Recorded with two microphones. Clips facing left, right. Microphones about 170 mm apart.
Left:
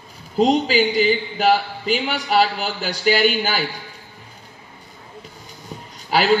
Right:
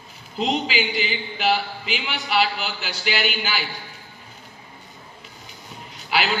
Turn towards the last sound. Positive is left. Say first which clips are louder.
# left 5 dB
turn(degrees=40)  # may be behind; listen again after turning